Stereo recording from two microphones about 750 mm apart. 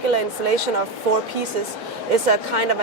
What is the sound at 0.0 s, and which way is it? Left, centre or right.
Speech, right.